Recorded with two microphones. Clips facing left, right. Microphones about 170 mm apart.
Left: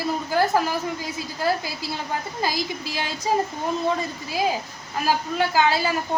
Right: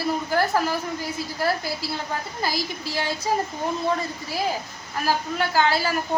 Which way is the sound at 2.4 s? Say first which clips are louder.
Left 2 dB; 15° left (ahead or behind).